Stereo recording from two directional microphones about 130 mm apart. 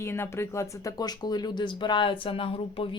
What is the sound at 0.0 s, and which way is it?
Speech, 20° left (ahead or behind).